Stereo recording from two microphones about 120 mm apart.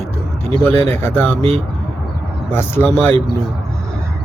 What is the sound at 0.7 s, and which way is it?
Speech, 20° left (ahead or behind).